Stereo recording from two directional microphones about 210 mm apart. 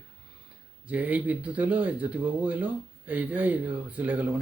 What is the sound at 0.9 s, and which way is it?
Speech, 10° right (ahead or behind).